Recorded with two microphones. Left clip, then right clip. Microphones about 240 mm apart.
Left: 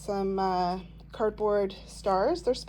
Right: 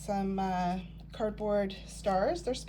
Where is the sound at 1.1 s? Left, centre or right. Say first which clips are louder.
Left 5 dB; left.